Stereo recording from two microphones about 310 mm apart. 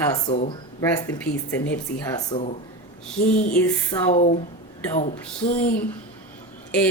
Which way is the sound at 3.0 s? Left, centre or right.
Centre.